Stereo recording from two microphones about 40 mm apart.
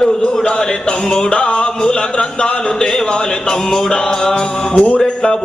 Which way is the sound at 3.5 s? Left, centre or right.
Centre.